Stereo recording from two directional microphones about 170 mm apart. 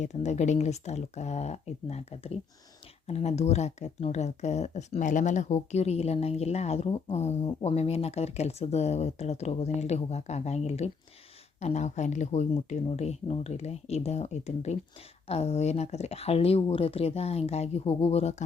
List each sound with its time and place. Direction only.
0.0 s speech: 45° left (ahead or behind)